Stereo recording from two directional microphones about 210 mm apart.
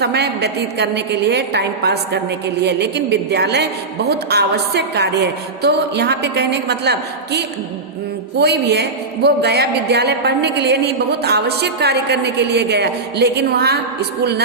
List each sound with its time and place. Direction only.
0.0 s a man's voice: 50° right (ahead or behind)